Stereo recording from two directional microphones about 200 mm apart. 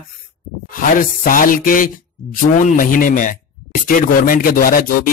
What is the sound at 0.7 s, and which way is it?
Speech, 45° left (ahead or behind).